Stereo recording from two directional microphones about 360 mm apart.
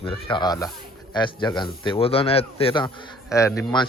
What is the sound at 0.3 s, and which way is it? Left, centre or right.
Speech, centre.